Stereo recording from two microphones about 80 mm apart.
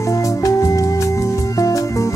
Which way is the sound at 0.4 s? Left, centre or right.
Left.